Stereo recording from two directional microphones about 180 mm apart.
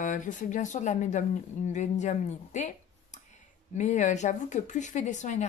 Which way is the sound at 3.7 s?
40° left (ahead or behind).